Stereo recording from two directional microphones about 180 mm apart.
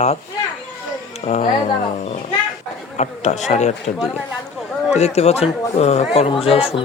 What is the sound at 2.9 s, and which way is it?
Speech, 40° left (ahead or behind).